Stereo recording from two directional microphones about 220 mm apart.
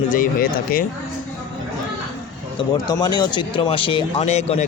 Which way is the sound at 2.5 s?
20° left (ahead or behind).